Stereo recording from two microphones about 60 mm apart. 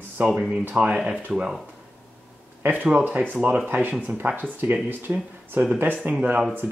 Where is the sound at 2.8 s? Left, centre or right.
Right.